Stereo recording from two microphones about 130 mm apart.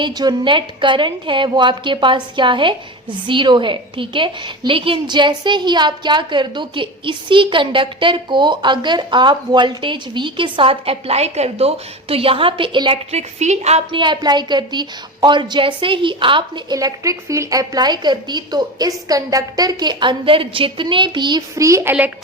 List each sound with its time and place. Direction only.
0.0 s a woman's voice: 35° right (ahead or behind)
13.1 s a woman's voice: 60° right (ahead or behind)
13.9 s a woman's voice: 35° right (ahead or behind)
16.7 s a woman's voice: 25° right (ahead or behind)
21.5 s a woman's voice: 25° right (ahead or behind)